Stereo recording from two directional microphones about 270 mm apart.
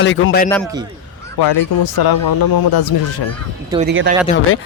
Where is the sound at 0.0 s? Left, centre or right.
Left.